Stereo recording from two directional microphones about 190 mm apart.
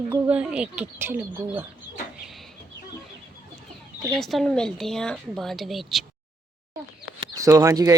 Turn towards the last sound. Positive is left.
turn(degrees=-20)  # may be behind; listen again after turning